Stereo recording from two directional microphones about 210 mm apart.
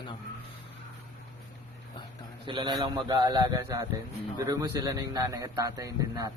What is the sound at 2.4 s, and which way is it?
A man's voice, 25° right (ahead or behind).